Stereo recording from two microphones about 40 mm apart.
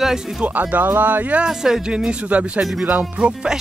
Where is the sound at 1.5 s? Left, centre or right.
Centre.